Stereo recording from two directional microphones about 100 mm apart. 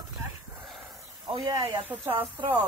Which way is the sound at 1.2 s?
45° right (ahead or behind).